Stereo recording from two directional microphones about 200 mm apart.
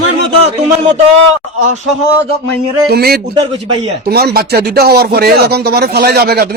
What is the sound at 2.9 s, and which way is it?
Speech, 50° right (ahead or behind).